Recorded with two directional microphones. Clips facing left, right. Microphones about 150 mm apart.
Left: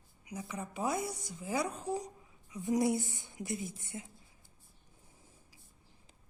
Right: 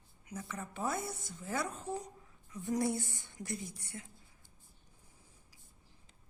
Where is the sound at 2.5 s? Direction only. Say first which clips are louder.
Left 3 dB; 20° left (ahead or behind).